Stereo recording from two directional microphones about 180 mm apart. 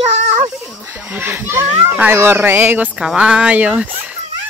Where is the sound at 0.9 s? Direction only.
10° right (ahead or behind).